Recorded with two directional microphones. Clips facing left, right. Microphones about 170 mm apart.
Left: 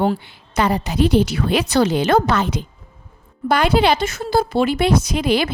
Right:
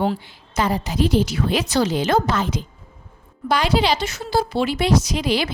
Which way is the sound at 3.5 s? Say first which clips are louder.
Left 3 dB; 55° left (ahead or behind).